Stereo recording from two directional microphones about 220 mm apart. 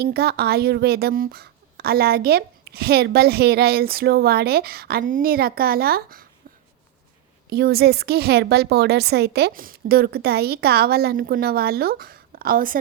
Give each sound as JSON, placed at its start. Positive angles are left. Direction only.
{"t": 0.0, "sound": "a woman's voice", "side_deg": -45}
{"t": 7.5, "sound": "a woman's voice", "side_deg": -45}